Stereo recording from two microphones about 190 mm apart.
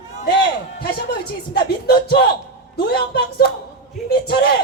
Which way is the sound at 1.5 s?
55° left (ahead or behind).